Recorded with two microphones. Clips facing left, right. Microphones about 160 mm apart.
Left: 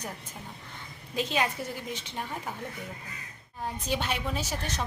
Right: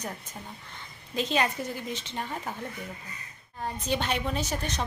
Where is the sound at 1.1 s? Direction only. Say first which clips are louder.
Right 2 dB; 5° left (ahead or behind).